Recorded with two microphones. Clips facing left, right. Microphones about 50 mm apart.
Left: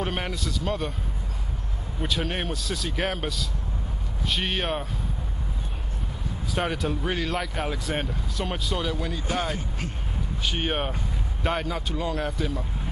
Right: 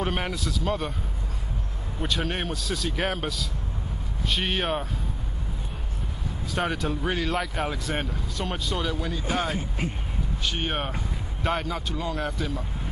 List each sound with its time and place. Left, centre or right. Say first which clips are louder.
0.0 s speech: right 1 dB; centre
2.0 s speech: even; centre
6.5 s speech: even; centre
9.6 s speech: right 3 dB; right
10.4 s speech: left 2 dB; centre